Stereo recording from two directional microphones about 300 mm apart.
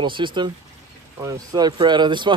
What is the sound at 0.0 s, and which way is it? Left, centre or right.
Speech, centre.